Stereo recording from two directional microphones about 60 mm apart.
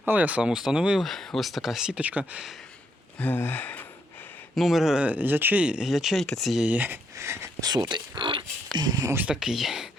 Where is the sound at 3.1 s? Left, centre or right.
Left.